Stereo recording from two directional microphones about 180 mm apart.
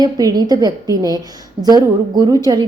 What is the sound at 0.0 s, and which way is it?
A woman's voice, 20° right (ahead or behind).